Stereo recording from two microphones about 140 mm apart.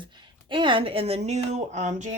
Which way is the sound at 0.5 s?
35° right (ahead or behind).